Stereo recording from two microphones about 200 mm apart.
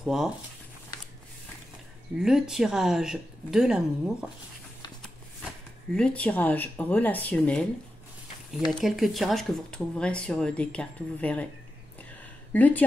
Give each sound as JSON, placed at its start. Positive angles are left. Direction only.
{"t": 0.0, "sound": "speech", "side_deg": 0}
{"t": 2.1, "sound": "speech", "side_deg": -5}
{"t": 5.9, "sound": "speech", "side_deg": 5}
{"t": 8.7, "sound": "speech", "side_deg": 0}
{"t": 12.5, "sound": "speech", "side_deg": 10}